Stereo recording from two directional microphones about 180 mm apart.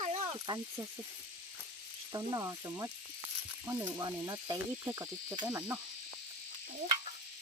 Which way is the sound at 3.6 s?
15° right (ahead or behind).